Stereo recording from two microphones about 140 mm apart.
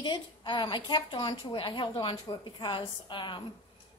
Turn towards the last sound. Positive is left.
turn(degrees=35)  # may be behind; listen again after turning